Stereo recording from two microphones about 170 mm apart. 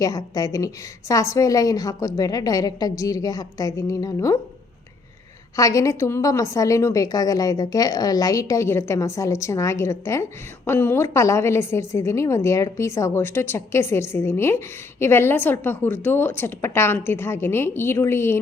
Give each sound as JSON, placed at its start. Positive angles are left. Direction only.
{"t": 0.0, "sound": "a woman's voice", "side_deg": 20}
{"t": 5.5, "sound": "a woman's voice", "side_deg": 20}